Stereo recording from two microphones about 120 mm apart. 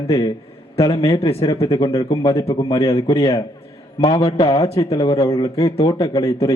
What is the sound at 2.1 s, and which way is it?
A man's voice, 25° left (ahead or behind).